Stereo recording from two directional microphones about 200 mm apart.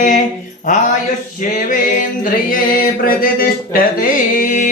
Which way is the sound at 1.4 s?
40° left (ahead or behind).